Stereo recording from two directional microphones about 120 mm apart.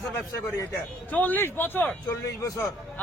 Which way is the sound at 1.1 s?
15° left (ahead or behind).